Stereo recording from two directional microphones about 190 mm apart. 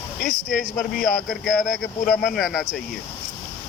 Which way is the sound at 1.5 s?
55° left (ahead or behind).